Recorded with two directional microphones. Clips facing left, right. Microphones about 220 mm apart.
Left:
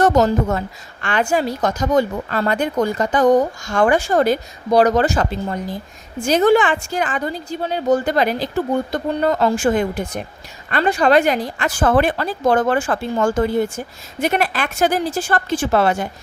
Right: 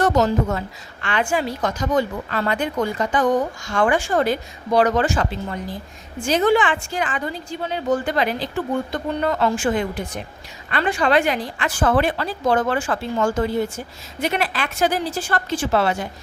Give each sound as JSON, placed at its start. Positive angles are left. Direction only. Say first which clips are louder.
{"t": 0.0, "sound": "a woman's voice", "louder": "left 3 dB", "side_deg": 45}